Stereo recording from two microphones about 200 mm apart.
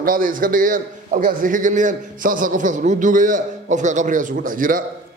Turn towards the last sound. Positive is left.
turn(degrees=-45)  # may be behind; listen again after turning